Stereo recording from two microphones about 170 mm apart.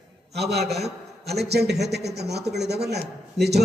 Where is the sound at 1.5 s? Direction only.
75° right (ahead or behind).